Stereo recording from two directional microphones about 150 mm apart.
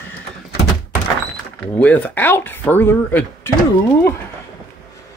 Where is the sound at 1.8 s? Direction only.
10° left (ahead or behind).